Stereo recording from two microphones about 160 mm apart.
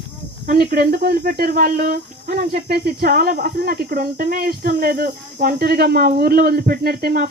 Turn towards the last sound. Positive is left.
turn(degrees=-75)  # may be behind; listen again after turning